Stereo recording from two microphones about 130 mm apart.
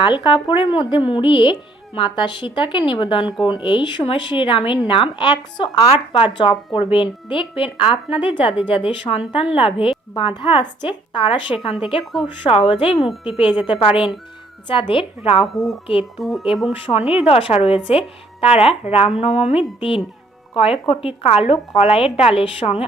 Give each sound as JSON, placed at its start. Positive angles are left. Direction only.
{"t": 0.0, "sound": "a woman's voice", "side_deg": 35}
{"t": 15.5, "sound": "speech", "side_deg": 0}
{"t": 16.8, "sound": "speech", "side_deg": 50}